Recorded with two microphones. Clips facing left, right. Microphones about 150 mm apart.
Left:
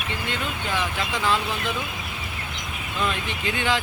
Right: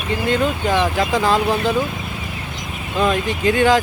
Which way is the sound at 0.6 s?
70° right (ahead or behind).